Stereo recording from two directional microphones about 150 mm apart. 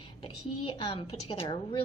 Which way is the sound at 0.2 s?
35° left (ahead or behind).